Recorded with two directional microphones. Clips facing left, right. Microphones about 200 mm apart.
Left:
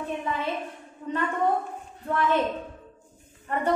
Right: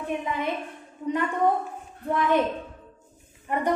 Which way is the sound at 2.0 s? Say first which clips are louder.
Right 2 dB; 15° right (ahead or behind).